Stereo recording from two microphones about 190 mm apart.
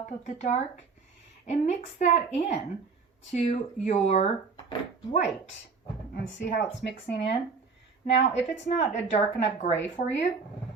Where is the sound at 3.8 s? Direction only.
35° left (ahead or behind).